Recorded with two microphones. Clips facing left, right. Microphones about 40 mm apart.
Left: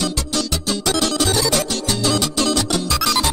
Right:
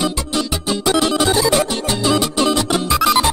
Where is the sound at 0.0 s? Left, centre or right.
Centre.